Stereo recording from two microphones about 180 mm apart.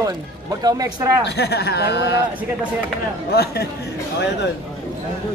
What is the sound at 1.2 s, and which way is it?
Speech, 65° left (ahead or behind).